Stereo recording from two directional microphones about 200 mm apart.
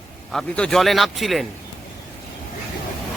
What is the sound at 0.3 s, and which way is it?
A man's voice, 5° left (ahead or behind).